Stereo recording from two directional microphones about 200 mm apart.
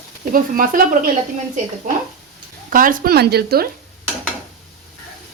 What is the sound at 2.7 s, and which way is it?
A woman's voice, 45° right (ahead or behind).